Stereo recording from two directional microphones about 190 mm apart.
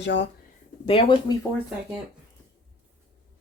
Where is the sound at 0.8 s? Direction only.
30° left (ahead or behind).